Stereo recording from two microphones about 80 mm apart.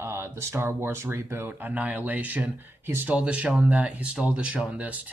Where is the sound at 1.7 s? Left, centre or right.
Centre.